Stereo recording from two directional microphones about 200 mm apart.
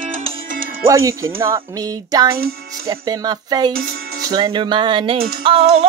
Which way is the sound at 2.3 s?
50° right (ahead or behind).